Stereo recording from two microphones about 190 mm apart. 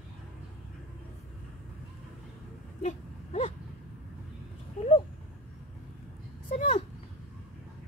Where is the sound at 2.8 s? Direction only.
35° left (ahead or behind).